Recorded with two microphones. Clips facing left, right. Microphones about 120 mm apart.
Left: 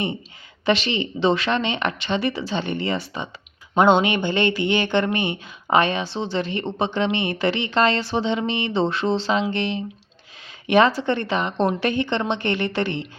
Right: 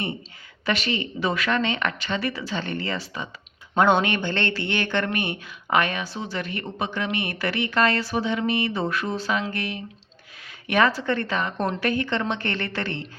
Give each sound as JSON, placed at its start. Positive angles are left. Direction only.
{"t": 0.6, "sound": "speech", "side_deg": 25}